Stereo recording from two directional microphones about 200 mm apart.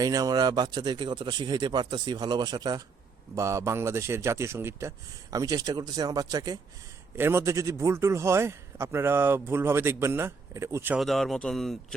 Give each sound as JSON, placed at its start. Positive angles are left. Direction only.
{"t": 0.0, "sound": "a man's voice", "side_deg": -20}
{"t": 11.0, "sound": "speech", "side_deg": 0}